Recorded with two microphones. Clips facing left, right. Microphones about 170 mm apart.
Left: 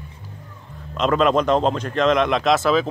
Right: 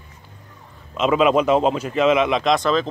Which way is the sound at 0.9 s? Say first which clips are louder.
Right 1 dB; 5° right (ahead or behind).